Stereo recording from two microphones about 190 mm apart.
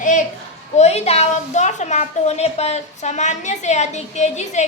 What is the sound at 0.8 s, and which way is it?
A woman's voice, 35° left (ahead or behind).